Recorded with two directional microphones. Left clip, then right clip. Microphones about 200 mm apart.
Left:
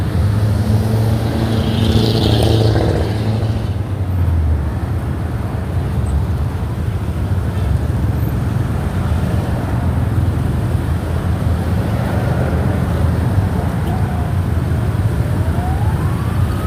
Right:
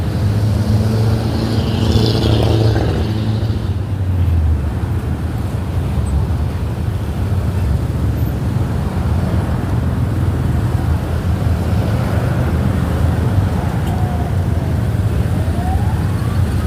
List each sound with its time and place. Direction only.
2.0 s vehicle: 35° left (ahead or behind)
2.3 s vehicle: 50° left (ahead or behind)